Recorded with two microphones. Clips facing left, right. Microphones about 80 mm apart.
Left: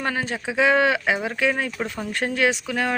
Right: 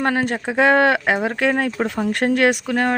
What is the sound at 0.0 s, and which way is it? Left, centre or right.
Speech, right.